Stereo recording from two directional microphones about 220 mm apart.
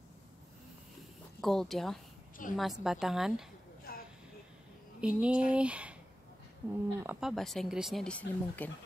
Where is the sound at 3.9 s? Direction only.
40° left (ahead or behind).